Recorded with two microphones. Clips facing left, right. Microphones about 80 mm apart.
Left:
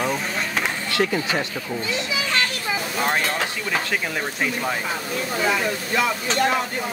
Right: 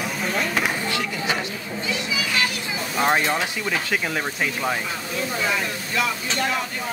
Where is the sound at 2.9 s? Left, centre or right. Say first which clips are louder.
Right 4 dB; centre.